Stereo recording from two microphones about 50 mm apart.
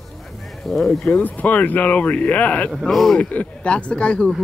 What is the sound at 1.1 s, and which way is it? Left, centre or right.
Speech, left.